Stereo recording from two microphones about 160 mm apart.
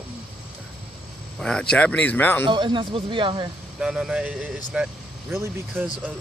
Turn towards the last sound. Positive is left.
turn(degrees=-10)  # may be behind; listen again after turning